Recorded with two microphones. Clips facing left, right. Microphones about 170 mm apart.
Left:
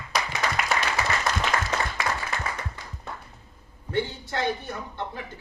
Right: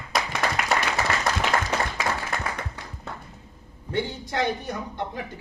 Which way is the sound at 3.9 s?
15° right (ahead or behind).